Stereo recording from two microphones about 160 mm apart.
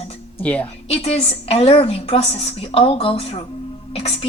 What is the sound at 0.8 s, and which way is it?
A woman's voice, 40° left (ahead or behind).